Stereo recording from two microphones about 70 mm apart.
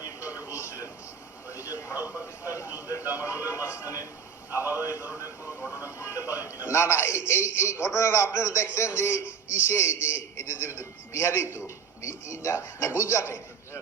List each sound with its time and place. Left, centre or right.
0.4 s television: left
1.5 s a sound: left
2.0 s a sound: right
3.2 s a man's voice: left
6.0 s music: left
6.7 s a man's voice: left